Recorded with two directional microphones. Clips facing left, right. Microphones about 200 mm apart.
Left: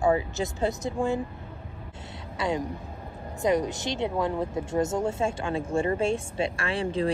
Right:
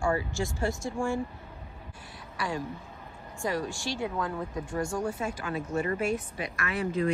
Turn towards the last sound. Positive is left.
turn(degrees=30)  # may be behind; listen again after turning